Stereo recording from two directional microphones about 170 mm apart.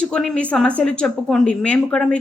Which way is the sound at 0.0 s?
5° left (ahead or behind).